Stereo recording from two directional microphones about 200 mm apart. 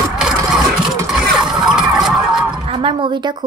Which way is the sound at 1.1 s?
Centre (ahead or behind).